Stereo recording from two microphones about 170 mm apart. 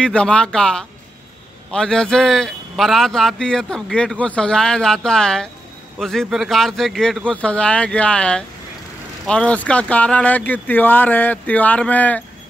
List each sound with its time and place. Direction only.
0.0 s a man's voice: 5° left (ahead or behind)